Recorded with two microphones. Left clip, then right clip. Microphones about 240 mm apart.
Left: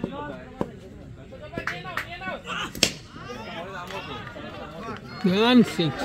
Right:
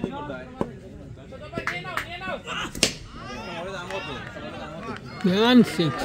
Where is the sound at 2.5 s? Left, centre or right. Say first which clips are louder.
Even; centre.